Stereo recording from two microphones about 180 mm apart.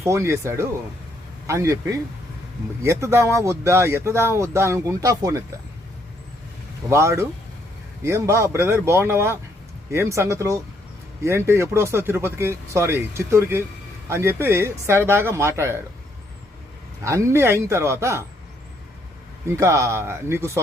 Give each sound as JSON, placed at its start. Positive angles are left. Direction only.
{"t": 0.0, "sound": "speech", "side_deg": -15}
{"t": 6.9, "sound": "speech", "side_deg": -15}
{"t": 17.0, "sound": "speech", "side_deg": -15}
{"t": 19.5, "sound": "speech", "side_deg": -15}